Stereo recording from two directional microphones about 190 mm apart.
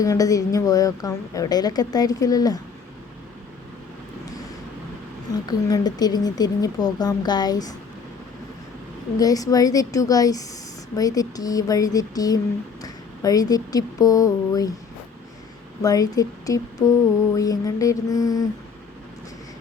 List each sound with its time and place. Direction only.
0.0 s a woman's voice: 20° left (ahead or behind)
5.3 s a woman's voice: 20° left (ahead or behind)
9.1 s a woman's voice: 20° left (ahead or behind)
15.8 s a woman's voice: 20° left (ahead or behind)
17.3 s mantra: 20° left (ahead or behind)